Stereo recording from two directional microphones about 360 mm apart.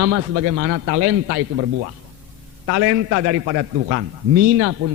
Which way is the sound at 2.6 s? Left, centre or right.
Right.